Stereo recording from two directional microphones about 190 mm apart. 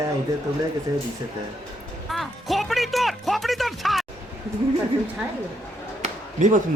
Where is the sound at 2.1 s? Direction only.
Centre (ahead or behind).